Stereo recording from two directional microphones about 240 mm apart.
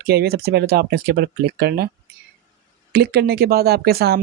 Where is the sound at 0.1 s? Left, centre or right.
Right.